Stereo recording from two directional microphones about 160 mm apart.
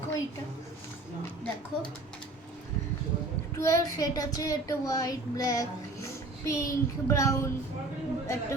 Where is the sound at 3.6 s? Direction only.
20° left (ahead or behind).